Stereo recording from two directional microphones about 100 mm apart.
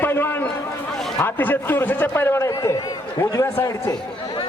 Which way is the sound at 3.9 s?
50° left (ahead or behind).